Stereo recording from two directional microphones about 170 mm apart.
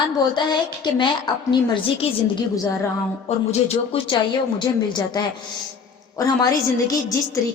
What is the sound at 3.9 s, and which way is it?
A woman's voice, 30° left (ahead or behind).